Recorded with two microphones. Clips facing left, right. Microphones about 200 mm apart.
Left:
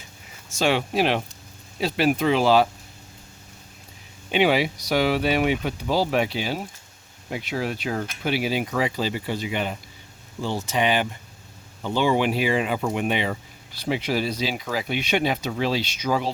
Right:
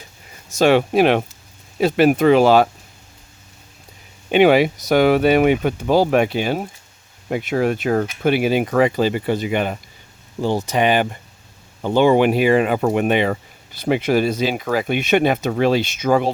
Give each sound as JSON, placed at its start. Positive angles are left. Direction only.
{"t": 0.6, "sound": "speech", "side_deg": -55}
{"t": 4.3, "sound": "speech", "side_deg": -55}